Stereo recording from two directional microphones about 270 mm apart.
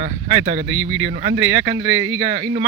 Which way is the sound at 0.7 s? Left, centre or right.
Right.